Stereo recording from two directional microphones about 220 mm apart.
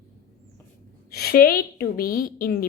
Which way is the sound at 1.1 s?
45° left (ahead or behind).